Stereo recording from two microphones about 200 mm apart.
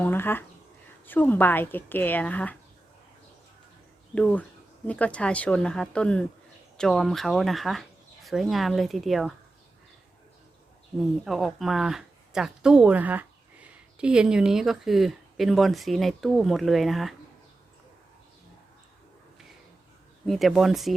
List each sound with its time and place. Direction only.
0.0 s a sound: 10° left (ahead or behind)
1.0 s speech: 10° left (ahead or behind)
4.1 s speech: 5° left (ahead or behind)
11.3 s speech: centre (ahead or behind)
20.2 s speech: centre (ahead or behind)